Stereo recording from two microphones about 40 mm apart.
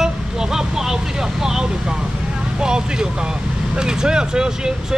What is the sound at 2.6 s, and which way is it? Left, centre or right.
Speech, centre.